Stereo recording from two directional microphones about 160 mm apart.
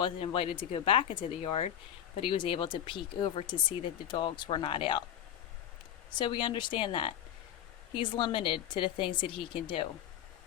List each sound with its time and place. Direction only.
0.0 s speech: 35° left (ahead or behind)
6.1 s speech: 30° left (ahead or behind)